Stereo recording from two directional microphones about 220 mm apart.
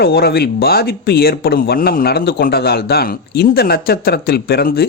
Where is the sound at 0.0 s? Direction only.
45° left (ahead or behind).